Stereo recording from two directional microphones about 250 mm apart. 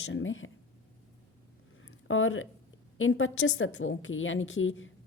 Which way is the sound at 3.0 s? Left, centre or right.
Left.